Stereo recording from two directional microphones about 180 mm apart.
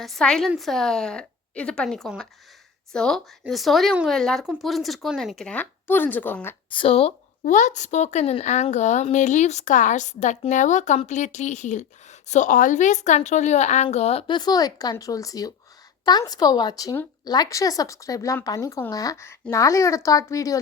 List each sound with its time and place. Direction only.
0.0 s speech: centre (ahead or behind)
6.7 s a woman's voice: 30° left (ahead or behind)
7.4 s a woman's voice: 45° left (ahead or behind); by 20.6 s 20° left (ahead or behind)